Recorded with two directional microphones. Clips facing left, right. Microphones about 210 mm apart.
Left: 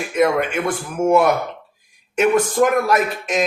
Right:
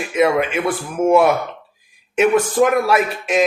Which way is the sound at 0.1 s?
5° right (ahead or behind).